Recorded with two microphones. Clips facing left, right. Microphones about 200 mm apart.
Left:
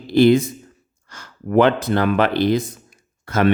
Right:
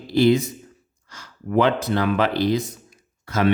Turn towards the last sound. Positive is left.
turn(degrees=55)  # may be behind; listen again after turning